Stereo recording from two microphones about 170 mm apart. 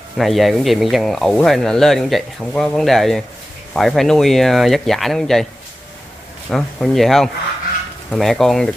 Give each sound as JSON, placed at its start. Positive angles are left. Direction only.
{"t": 0.2, "sound": "speech", "side_deg": 0}
{"t": 6.5, "sound": "speech", "side_deg": 0}